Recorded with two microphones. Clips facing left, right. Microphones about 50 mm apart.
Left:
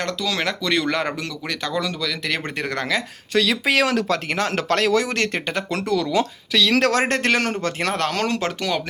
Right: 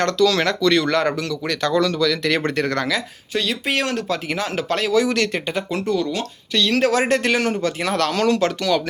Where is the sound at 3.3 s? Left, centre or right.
Left.